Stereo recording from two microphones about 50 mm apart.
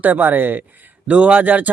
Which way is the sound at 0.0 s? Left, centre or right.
Right.